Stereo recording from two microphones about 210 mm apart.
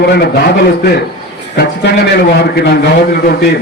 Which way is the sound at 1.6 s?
50° left (ahead or behind).